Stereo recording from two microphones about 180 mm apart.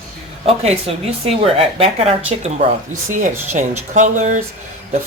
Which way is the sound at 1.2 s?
35° right (ahead or behind).